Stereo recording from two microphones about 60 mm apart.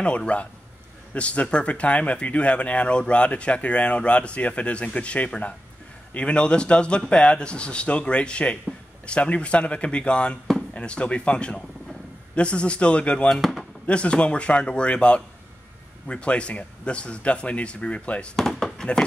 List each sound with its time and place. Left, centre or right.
0.0 s speech: centre
13.4 s a sound: centre
13.8 s speech: centre
18.3 s speech: centre